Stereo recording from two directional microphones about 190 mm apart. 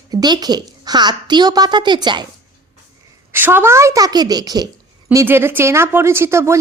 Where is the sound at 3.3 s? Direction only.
10° right (ahead or behind).